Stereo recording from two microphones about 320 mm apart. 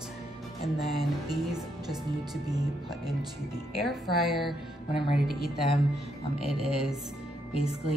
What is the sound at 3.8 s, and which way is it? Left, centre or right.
Speech, centre.